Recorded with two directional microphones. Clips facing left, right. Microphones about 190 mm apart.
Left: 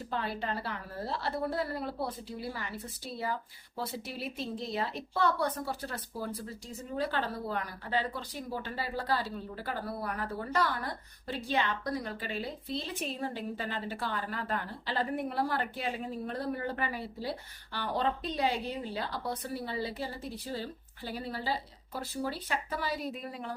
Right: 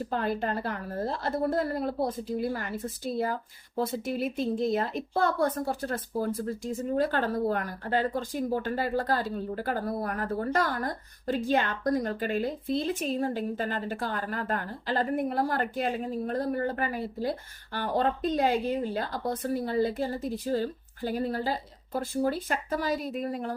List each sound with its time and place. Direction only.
0.1 s a woman's voice: 45° right (ahead or behind)